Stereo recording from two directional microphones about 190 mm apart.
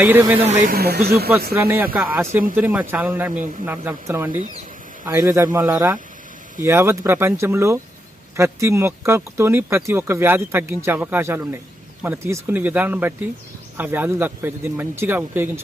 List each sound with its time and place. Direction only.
0.0 s speech: 10° right (ahead or behind)
0.4 s speech: 50° right (ahead or behind)
1.5 s speech: 10° right (ahead or behind)